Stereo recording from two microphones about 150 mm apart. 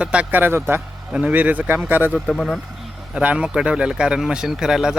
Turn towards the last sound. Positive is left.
turn(degrees=-5)  # may be behind; listen again after turning